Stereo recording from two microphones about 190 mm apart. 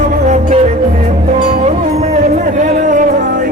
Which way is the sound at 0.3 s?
40° right (ahead or behind).